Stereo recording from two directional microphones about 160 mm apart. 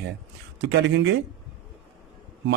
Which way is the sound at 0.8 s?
90° right.